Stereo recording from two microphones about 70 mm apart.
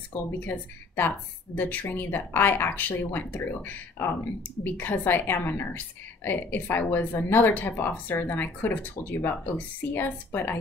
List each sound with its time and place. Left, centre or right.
0.1 s a woman's voice: left